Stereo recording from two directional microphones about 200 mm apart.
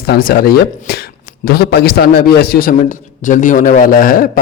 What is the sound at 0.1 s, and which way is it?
A man's voice, 45° left (ahead or behind).